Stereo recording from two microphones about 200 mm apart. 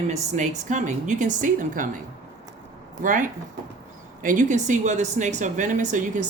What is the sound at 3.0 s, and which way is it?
Speech, 40° right (ahead or behind).